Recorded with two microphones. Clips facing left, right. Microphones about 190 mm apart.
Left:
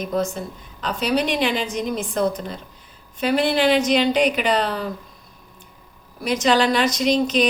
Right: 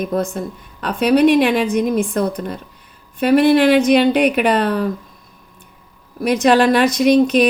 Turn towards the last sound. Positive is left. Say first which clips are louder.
# right 6 dB
turn(degrees=-60)  # may be behind; listen again after turning